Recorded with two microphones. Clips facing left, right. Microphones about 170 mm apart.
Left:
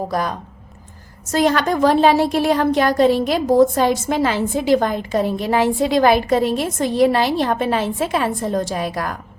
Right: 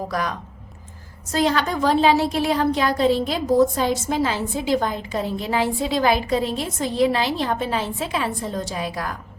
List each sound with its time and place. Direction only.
0.1 s speech: 35° left (ahead or behind)
1.3 s a woman's voice: 50° left (ahead or behind)
5.6 s a woman's voice: 70° left (ahead or behind)
6.1 s a woman's voice: 55° left (ahead or behind)